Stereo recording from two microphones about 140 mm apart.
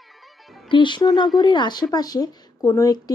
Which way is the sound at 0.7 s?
35° left (ahead or behind).